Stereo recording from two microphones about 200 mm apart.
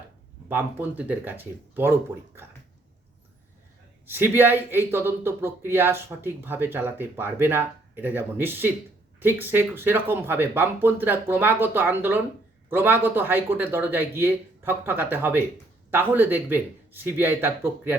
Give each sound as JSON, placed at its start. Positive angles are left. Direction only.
{"t": 0.4, "sound": "speech", "side_deg": -10}
{"t": 4.0, "sound": "speech", "side_deg": -10}